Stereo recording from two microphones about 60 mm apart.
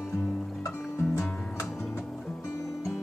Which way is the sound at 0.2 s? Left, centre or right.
Left.